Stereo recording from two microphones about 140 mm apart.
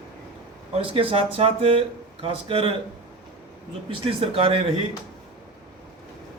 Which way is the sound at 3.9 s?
40° right (ahead or behind).